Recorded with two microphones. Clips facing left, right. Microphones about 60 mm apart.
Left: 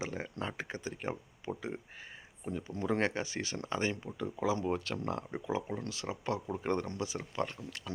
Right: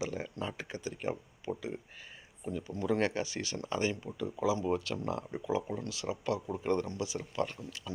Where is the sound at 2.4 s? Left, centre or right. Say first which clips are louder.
Right 1 dB; left.